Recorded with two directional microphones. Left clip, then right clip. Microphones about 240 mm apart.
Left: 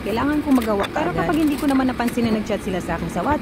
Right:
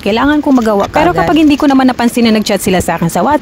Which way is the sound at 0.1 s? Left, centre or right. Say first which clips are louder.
Right 10 dB; right.